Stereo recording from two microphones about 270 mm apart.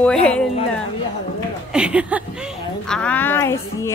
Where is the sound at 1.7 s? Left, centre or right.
Centre.